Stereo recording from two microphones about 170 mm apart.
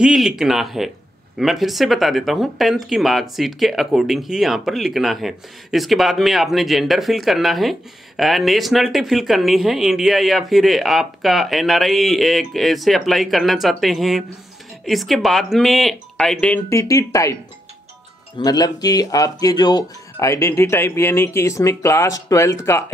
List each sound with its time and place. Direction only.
0.0 s speech: 5° right (ahead or behind)
16.6 s speech: 20° left (ahead or behind)
18.4 s speech: 25° left (ahead or behind)